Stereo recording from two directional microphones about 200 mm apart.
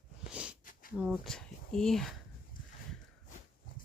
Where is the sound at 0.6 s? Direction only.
45° left (ahead or behind).